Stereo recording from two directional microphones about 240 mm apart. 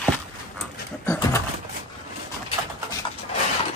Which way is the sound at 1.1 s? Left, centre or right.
Centre.